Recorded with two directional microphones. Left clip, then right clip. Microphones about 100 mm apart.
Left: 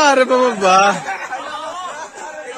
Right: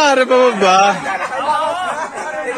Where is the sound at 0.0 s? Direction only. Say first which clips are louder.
Right 1 dB; 50° left (ahead or behind).